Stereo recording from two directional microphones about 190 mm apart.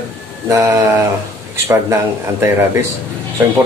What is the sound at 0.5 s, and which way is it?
Speech, 15° right (ahead or behind).